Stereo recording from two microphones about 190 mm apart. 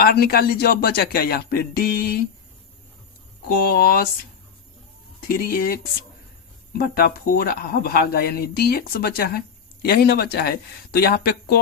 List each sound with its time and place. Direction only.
0.0 s speech: 55° left (ahead or behind)
3.5 s speech: 50° left (ahead or behind)
5.4 s speech: 50° left (ahead or behind)